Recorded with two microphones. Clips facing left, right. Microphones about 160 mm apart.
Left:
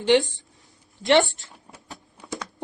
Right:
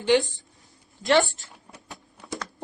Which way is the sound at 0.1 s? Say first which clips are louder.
Left 2 dB; 20° left (ahead or behind).